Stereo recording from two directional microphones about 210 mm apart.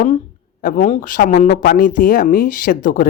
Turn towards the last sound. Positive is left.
turn(degrees=40)  # may be behind; listen again after turning